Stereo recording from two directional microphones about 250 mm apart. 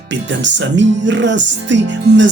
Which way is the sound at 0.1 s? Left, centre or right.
Right.